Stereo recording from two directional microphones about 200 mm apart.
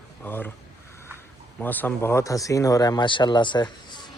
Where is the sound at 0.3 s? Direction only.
10° left (ahead or behind).